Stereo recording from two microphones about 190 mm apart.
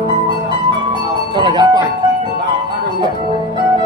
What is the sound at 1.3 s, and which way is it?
Music, 25° right (ahead or behind).